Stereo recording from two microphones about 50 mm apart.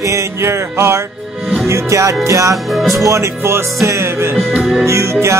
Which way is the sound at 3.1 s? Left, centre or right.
Right.